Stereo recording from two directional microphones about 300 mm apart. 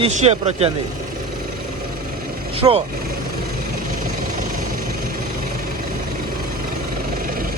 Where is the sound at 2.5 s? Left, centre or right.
Centre.